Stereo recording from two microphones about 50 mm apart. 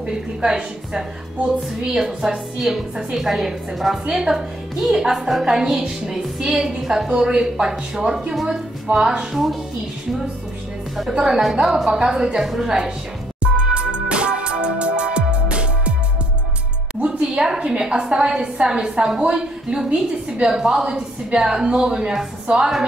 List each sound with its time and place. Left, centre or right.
0.0 s a woman's voice: centre
2.6 s a woman's voice: centre
11.1 s a woman's voice: centre
13.4 s music: right
17.0 s music: right
17.5 s a woman's voice: centre
20.4 s a woman's voice: centre